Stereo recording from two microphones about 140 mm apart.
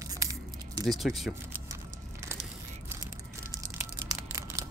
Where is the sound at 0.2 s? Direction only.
25° right (ahead or behind).